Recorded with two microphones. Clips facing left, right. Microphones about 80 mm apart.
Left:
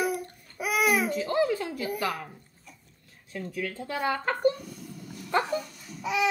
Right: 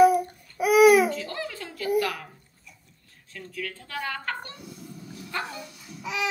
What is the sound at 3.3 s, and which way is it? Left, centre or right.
Speech, left.